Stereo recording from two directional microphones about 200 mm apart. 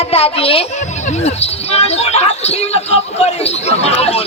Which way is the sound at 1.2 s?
30° left (ahead or behind).